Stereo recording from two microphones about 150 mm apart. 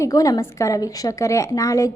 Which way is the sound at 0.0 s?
25° left (ahead or behind).